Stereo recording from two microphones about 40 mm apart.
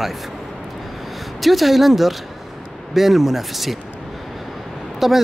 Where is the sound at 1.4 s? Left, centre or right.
Centre.